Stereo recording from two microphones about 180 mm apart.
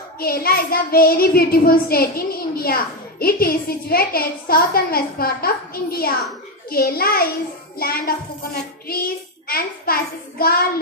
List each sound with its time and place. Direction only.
0.2 s a child's voice: 55° left (ahead or behind)
8.8 s child singing: 55° left (ahead or behind)
10.4 s a child's voice: 55° left (ahead or behind)